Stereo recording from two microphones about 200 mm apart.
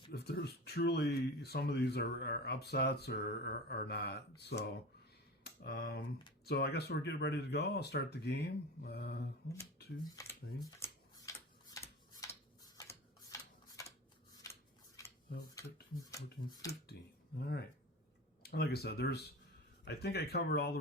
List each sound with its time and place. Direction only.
0.1 s speech: 55° left (ahead or behind)
10.0 s speech: 20° left (ahead or behind)
11.3 s tick-tock: 15° left (ahead or behind)
11.7 s a sound: 15° left (ahead or behind)
15.0 s a sound: 15° left (ahead or behind)
16.1 s speech: 15° left (ahead or behind)
16.9 s speech: 60° left (ahead or behind)
18.4 s speech: 55° left (ahead or behind)